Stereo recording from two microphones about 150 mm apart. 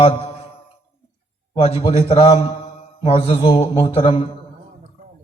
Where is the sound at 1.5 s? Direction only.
40° left (ahead or behind).